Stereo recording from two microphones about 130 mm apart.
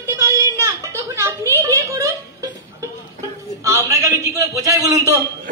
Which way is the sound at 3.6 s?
20° right (ahead or behind).